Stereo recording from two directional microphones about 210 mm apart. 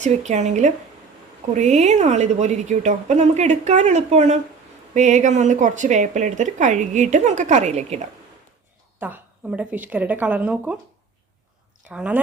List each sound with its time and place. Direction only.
0.0 s a woman's voice: 35° right (ahead or behind)
9.0 s speech: 10° right (ahead or behind)
11.9 s speech: 5° right (ahead or behind)